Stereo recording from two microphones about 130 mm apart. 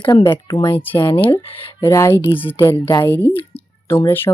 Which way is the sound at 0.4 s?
30° left (ahead or behind).